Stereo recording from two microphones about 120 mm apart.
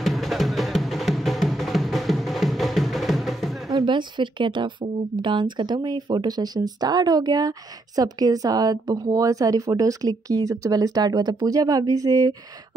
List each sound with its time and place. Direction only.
0.0 s music: centre (ahead or behind)
3.7 s speech: 40° right (ahead or behind)